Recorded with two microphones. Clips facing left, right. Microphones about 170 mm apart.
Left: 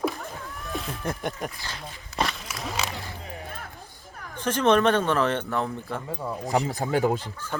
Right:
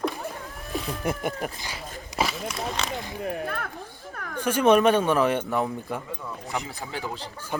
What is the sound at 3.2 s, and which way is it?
Music, 65° right (ahead or behind).